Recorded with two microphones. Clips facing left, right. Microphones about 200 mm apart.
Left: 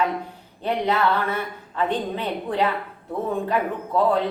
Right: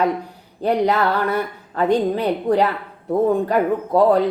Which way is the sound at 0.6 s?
40° right (ahead or behind).